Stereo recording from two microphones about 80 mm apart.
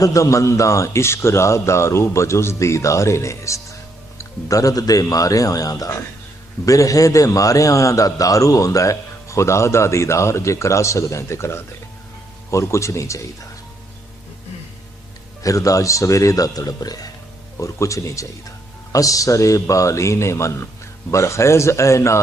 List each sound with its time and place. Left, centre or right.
0.0 s a man's voice: left
15.4 s speech: left
17.6 s a man's voice: left